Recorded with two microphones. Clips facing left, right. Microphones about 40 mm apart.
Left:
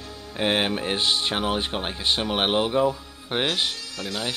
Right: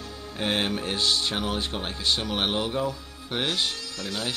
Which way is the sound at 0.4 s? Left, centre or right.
Centre.